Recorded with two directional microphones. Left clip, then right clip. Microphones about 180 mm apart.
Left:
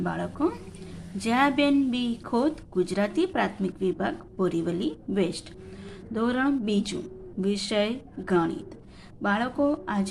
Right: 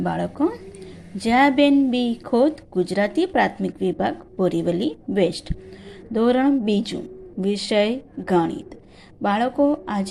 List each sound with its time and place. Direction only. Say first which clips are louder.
0.0 s a woman's voice: right 5 dB; 20° right (ahead or behind)